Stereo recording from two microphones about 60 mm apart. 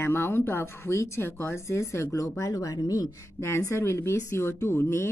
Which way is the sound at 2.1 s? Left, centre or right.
Left.